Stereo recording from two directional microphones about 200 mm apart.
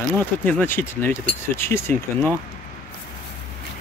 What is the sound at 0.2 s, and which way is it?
Speech, 10° left (ahead or behind).